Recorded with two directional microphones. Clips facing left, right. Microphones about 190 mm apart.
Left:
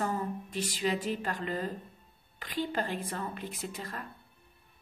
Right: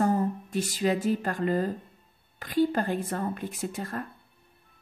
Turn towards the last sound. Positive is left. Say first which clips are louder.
# right 7 dB
turn(degrees=-45)  # may be behind; listen again after turning